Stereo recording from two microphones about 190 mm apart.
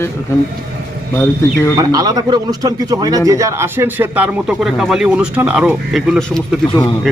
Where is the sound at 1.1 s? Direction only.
15° left (ahead or behind).